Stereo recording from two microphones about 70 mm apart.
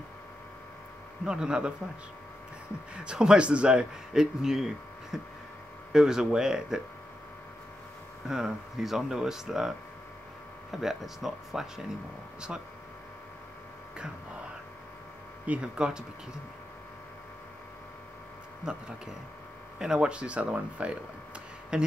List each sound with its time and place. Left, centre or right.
1.2 s a man's voice: centre
3.0 s a man's voice: centre
8.3 s speech: centre
15.4 s a man's voice: centre
18.6 s a man's voice: centre